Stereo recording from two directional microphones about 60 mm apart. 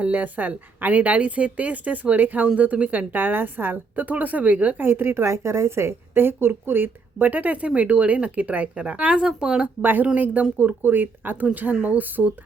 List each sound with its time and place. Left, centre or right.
0.0 s a woman's voice: right
4.9 s a woman's voice: right; by 9.6 s centre
9.8 s a woman's voice: right